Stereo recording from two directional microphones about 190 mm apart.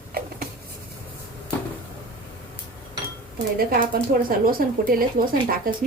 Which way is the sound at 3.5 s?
50° right (ahead or behind).